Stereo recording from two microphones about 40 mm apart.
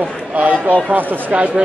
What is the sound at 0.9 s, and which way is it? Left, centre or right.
Speech, right.